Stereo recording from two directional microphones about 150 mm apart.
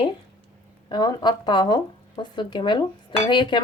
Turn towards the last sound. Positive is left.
turn(degrees=30)  # may be behind; listen again after turning